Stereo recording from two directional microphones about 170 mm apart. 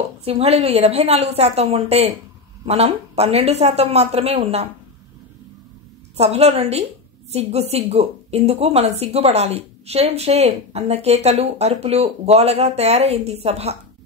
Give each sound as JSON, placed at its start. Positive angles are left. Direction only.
{"t": 0.2, "sound": "speech", "side_deg": -35}
{"t": 6.1, "sound": "speech", "side_deg": -35}